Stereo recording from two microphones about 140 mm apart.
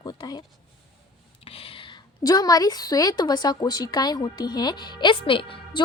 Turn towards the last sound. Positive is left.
turn(degrees=40)  # may be behind; listen again after turning